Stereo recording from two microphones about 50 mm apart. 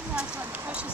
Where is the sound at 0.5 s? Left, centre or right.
Right.